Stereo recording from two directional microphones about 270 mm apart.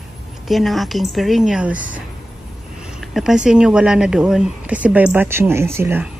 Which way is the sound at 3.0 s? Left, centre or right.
Centre.